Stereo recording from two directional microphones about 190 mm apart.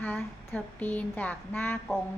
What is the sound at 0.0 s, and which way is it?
A woman's voice, 10° left (ahead or behind).